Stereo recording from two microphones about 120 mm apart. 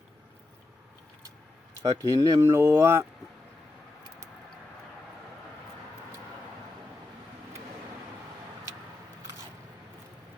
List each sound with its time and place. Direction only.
1.8 s speech: 25° right (ahead or behind)